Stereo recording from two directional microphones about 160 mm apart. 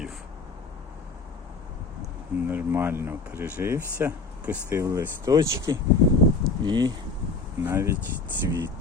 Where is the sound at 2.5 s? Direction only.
10° right (ahead or behind).